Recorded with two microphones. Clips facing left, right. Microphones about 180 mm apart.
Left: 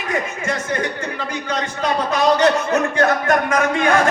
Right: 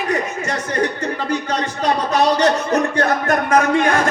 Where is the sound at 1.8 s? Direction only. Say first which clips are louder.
Right 1 dB; 35° right (ahead or behind).